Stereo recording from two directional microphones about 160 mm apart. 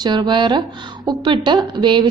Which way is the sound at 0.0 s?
25° right (ahead or behind).